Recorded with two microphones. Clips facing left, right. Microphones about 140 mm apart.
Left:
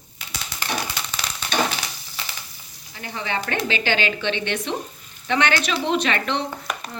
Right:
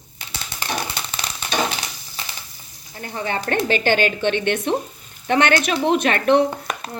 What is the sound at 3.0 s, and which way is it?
A woman's voice, 45° right (ahead or behind).